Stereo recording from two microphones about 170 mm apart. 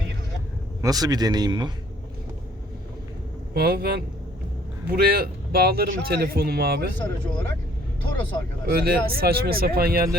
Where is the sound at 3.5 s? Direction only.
65° right (ahead or behind).